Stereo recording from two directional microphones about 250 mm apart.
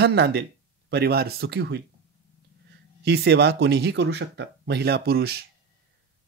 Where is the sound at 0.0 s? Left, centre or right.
Right.